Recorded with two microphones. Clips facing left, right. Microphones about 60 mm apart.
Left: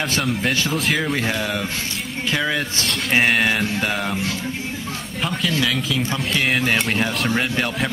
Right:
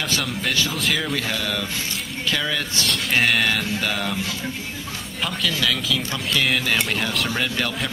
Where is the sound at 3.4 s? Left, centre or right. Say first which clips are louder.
Left 2 dB; left.